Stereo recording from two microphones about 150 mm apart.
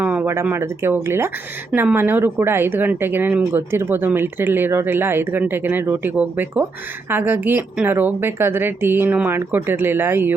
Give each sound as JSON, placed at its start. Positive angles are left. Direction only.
{"t": 0.0, "sound": "speech", "side_deg": -10}